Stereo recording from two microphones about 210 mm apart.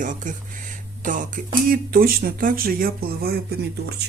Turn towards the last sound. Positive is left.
turn(degrees=-50)  # may be behind; listen again after turning